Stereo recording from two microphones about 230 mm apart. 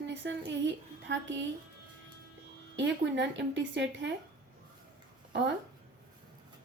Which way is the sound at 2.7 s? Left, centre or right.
Right.